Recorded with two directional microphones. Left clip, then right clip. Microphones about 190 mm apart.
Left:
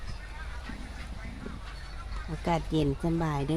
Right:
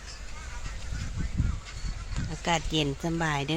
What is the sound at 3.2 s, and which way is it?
Speech, 10° left (ahead or behind).